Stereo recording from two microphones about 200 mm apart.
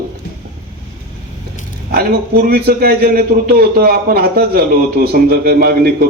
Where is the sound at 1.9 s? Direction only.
50° right (ahead or behind).